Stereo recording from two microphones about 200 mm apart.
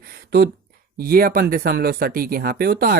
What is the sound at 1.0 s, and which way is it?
Speech, 50° right (ahead or behind).